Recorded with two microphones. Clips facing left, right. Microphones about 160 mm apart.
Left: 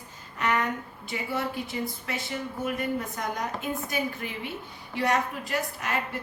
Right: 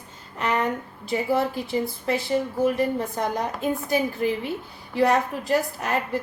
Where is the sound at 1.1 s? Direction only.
35° right (ahead or behind).